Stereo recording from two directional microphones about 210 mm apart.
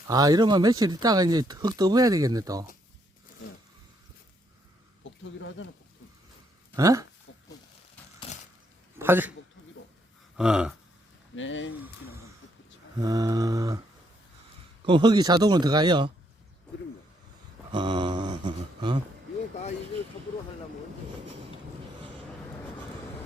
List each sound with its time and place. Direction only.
0.1 s speech: 15° right (ahead or behind)
5.2 s speech: 65° left (ahead or behind)
6.7 s speech: 15° right (ahead or behind)
9.0 s a man's voice: 10° right (ahead or behind)
10.3 s a sound: 5° right (ahead or behind)
11.3 s speech: 65° left (ahead or behind)
13.0 s speech: 20° right (ahead or behind)
14.8 s speech: 20° right (ahead or behind)
17.7 s a sound: 20° right (ahead or behind)